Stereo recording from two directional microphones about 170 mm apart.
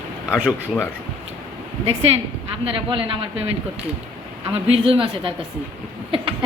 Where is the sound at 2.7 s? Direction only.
30° right (ahead or behind).